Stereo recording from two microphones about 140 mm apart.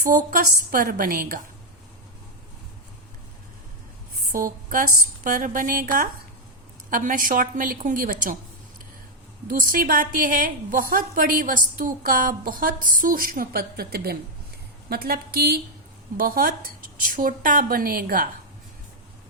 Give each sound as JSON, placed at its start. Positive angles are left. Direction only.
{"t": 0.0, "sound": "a woman's voice", "side_deg": -90}
{"t": 4.3, "sound": "a woman's voice", "side_deg": -85}
{"t": 6.9, "sound": "a woman's voice", "side_deg": -75}
{"t": 9.5, "sound": "a woman's voice", "side_deg": -85}